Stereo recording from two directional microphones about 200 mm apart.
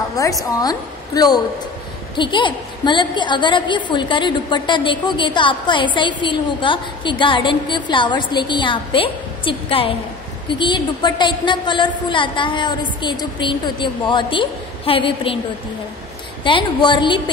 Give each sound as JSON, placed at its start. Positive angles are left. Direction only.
{"t": 0.1, "sound": "a woman's voice", "side_deg": 15}
{"t": 16.4, "sound": "a woman's voice", "side_deg": 25}